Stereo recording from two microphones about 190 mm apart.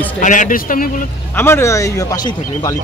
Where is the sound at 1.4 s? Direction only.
15° left (ahead or behind).